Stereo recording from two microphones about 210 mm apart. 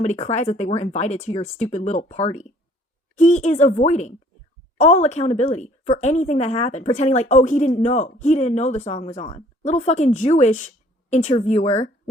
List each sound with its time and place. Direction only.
0.0 s a woman's voice: 30° left (ahead or behind)